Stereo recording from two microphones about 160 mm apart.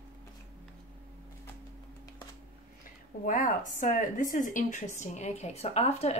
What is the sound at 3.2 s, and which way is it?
A woman's voice, 55° left (ahead or behind).